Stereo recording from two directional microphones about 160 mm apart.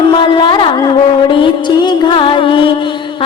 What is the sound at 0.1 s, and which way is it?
Music, 30° left (ahead or behind).